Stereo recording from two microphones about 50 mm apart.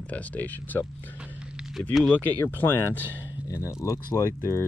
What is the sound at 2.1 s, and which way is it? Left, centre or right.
Speech, left.